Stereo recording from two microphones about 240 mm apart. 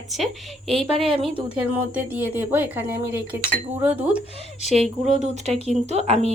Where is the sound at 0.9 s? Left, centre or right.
Right.